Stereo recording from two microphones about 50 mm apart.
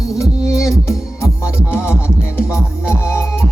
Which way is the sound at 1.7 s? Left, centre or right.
Left.